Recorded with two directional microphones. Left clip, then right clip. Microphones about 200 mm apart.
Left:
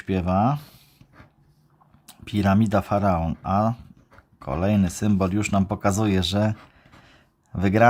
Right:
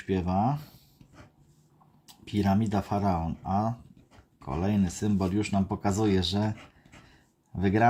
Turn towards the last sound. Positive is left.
turn(degrees=30)  # may be behind; listen again after turning